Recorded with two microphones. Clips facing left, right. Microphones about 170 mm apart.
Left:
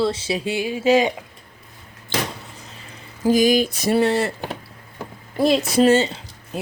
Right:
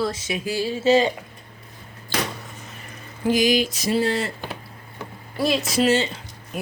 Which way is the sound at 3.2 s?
45° left (ahead or behind).